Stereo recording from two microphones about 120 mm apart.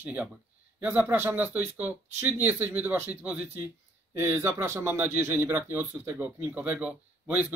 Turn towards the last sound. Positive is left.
turn(degrees=-10)  # may be behind; listen again after turning